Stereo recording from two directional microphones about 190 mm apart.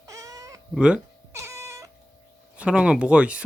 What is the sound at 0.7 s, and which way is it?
Cat, 5° right (ahead or behind).